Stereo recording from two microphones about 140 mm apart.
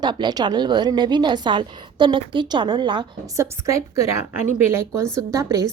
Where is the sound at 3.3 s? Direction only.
20° right (ahead or behind).